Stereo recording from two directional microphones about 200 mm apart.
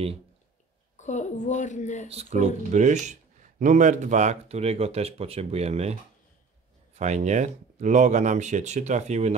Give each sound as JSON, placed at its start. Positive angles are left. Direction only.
{"t": 0.9, "sound": "a woman's voice", "side_deg": 35}
{"t": 2.0, "sound": "speech", "side_deg": -35}
{"t": 7.0, "sound": "speech", "side_deg": -35}